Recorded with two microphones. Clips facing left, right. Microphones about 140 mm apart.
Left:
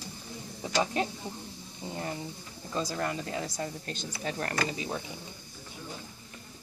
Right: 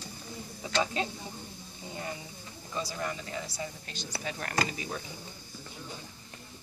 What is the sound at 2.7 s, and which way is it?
Speech, 45° left (ahead or behind).